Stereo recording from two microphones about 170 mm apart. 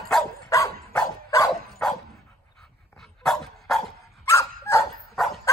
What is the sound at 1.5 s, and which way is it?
Dog, centre (ahead or behind).